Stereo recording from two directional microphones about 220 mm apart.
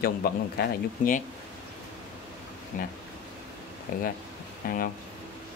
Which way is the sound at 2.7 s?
40° left (ahead or behind).